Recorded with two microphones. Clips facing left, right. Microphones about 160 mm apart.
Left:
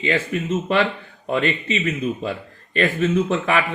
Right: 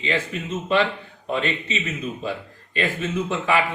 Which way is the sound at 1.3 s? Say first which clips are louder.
Left 4 dB; 55° left (ahead or behind).